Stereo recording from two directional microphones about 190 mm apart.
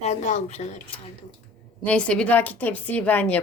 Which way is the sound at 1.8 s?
5° left (ahead or behind).